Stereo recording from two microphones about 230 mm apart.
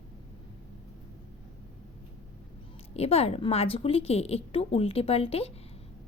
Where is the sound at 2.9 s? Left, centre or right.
Left.